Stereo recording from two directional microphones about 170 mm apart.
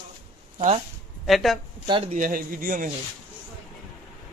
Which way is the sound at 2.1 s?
55° right (ahead or behind).